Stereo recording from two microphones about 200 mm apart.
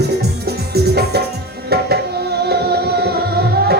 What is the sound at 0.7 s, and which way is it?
Music, 55° right (ahead or behind).